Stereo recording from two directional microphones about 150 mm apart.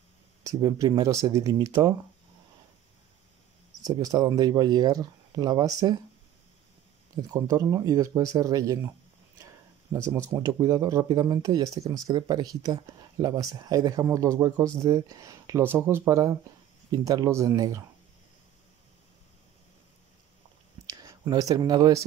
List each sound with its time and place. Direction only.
0.4 s speech: 25° right (ahead or behind)
3.8 s speech: 25° right (ahead or behind)
7.2 s speech: 25° right (ahead or behind)
10.1 s speech: 20° right (ahead or behind)
20.8 s speech: 25° right (ahead or behind)